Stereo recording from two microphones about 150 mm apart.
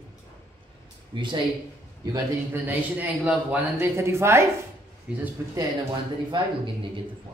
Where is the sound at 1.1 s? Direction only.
30° right (ahead or behind).